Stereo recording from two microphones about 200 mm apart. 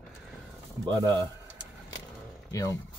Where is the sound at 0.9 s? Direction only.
15° right (ahead or behind).